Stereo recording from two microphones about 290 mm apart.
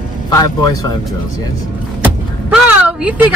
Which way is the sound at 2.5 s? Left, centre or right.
Centre.